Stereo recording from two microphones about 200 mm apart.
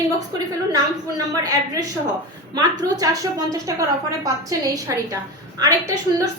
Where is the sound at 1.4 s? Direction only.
20° right (ahead or behind).